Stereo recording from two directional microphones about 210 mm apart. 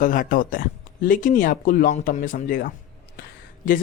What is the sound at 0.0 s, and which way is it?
Speech, 40° left (ahead or behind).